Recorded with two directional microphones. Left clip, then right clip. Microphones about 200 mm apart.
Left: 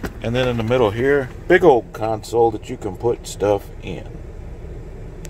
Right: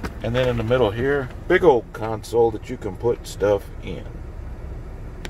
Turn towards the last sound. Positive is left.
turn(degrees=15)  # may be behind; listen again after turning